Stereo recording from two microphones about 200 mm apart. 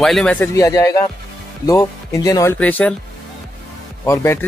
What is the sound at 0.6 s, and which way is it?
Speech, 15° left (ahead or behind).